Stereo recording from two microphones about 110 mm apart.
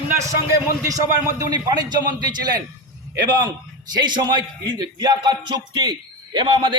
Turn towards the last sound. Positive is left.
turn(degrees=-45)  # may be behind; listen again after turning